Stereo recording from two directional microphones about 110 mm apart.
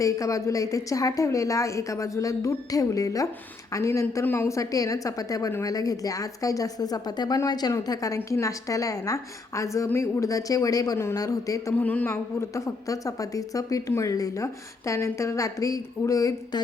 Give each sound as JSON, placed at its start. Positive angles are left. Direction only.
{"t": 0.0, "sound": "a woman's voice", "side_deg": 30}
{"t": 11.8, "sound": "a woman's voice", "side_deg": 15}